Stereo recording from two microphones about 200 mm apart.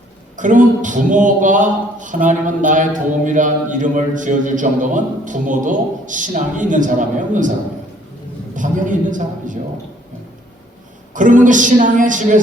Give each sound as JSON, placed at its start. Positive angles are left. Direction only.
{"t": 0.3, "sound": "a man's voice", "side_deg": -40}
{"t": 8.5, "sound": "a man's voice", "side_deg": -40}
{"t": 11.1, "sound": "a man's voice", "side_deg": -40}